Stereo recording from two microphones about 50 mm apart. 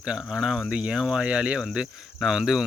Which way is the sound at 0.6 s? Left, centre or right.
Right.